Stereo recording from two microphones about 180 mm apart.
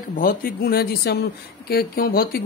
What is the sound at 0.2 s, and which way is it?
Speech, 55° left (ahead or behind).